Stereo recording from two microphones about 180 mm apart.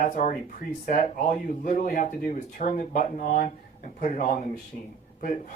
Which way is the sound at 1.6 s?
45° left (ahead or behind).